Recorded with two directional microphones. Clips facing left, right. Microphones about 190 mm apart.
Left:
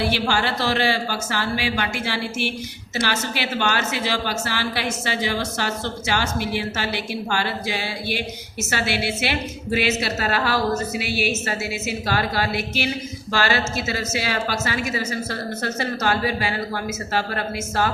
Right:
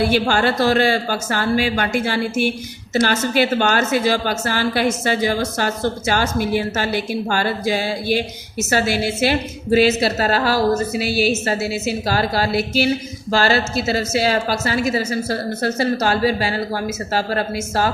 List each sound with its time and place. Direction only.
0.1 s a woman's voice: 50° right (ahead or behind)